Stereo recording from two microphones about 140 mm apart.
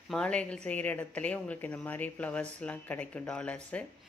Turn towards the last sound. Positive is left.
turn(degrees=10)  # may be behind; listen again after turning